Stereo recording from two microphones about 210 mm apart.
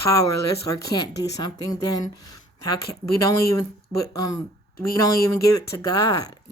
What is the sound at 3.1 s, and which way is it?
Speech, 15° left (ahead or behind).